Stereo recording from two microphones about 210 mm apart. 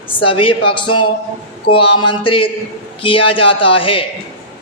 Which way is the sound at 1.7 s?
90° left.